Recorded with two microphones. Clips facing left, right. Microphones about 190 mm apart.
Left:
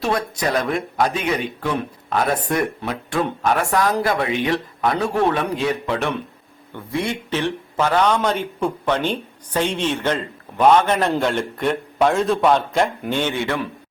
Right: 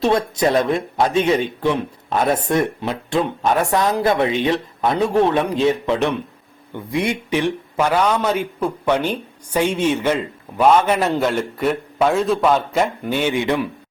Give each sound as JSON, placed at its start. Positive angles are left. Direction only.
{"t": 0.0, "sound": "a man's voice", "side_deg": -25}